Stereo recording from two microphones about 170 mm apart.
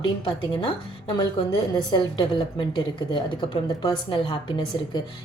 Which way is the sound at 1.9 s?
25° left (ahead or behind).